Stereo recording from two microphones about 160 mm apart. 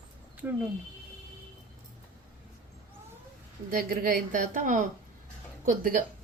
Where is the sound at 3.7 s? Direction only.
65° right (ahead or behind).